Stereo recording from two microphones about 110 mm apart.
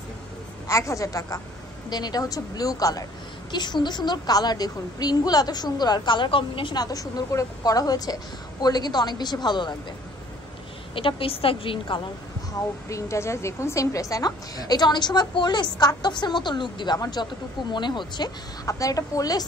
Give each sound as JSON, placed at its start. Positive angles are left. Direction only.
{"t": 0.7, "sound": "a woman's voice", "side_deg": 30}
{"t": 6.8, "sound": "a woman's voice", "side_deg": 35}
{"t": 11.0, "sound": "a woman's voice", "side_deg": 55}
{"t": 12.9, "sound": "a woman's voice", "side_deg": 25}
{"t": 18.7, "sound": "a woman's voice", "side_deg": 30}